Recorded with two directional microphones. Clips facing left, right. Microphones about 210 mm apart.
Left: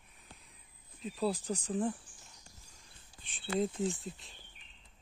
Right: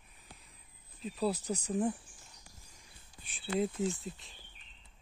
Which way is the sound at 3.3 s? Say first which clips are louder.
Even; 5° right (ahead or behind).